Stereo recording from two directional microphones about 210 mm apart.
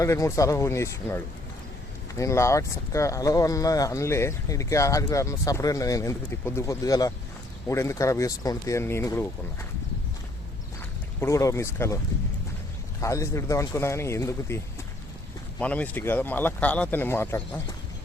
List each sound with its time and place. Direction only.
0.0 s speech: 15° left (ahead or behind)
11.2 s speech: 15° left (ahead or behind)
13.0 s speech: 15° left (ahead or behind)